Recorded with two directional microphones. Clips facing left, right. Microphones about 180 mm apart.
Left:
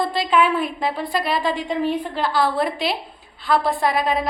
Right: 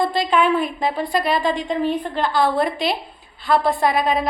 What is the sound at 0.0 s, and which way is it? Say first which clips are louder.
A woman's voice: right 1 dB; centre (ahead or behind).